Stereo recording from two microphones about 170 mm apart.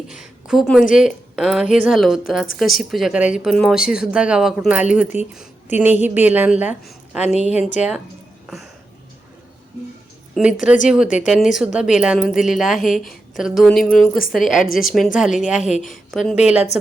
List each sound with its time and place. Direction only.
0.1 s a sound: 5° right (ahead or behind)
0.9 s a woman's voice: 5° right (ahead or behind)
10.3 s a woman's voice: 5° right (ahead or behind)
15.6 s a woman's voice: 45° left (ahead or behind)
16.1 s a woman's voice: centre (ahead or behind)